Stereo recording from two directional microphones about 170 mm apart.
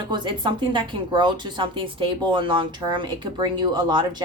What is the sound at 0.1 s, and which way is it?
Speech, 25° right (ahead or behind).